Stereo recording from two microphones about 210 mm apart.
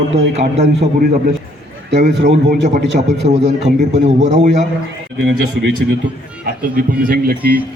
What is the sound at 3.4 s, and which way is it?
A man's voice, 30° right (ahead or behind).